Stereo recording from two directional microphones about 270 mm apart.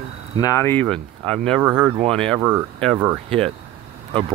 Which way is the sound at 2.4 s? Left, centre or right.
Centre.